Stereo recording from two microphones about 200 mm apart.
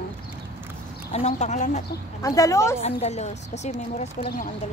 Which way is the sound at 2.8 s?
35° left (ahead or behind).